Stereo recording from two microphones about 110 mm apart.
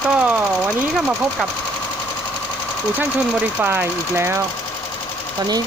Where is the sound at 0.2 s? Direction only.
15° right (ahead or behind).